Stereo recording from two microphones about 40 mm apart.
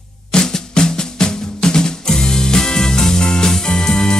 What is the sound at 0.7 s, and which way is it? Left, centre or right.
Music, centre.